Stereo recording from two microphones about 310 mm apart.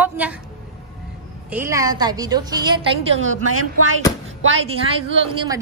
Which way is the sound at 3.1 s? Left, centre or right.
Right.